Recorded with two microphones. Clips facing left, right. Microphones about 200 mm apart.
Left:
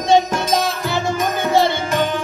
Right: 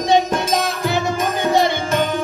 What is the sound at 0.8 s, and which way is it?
Music, 15° right (ahead or behind).